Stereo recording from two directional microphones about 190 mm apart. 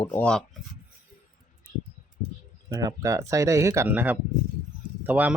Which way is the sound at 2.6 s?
20° right (ahead or behind).